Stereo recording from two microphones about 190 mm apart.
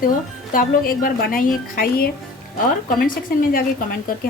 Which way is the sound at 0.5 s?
50° left (ahead or behind).